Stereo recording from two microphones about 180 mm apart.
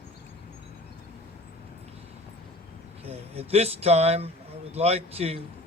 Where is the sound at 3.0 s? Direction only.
35° right (ahead or behind).